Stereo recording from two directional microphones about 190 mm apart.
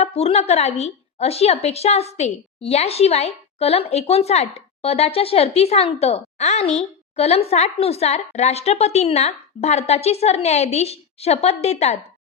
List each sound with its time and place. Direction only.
0.0 s a woman's voice: 30° left (ahead or behind)